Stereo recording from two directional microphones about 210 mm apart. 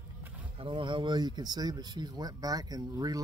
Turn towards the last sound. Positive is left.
turn(degrees=-15)  # may be behind; listen again after turning